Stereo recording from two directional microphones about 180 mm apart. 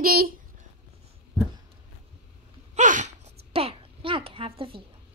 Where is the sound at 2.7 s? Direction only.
45° right (ahead or behind).